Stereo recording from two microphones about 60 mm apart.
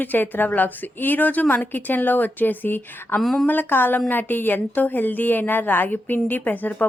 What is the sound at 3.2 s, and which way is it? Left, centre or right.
Speech, centre.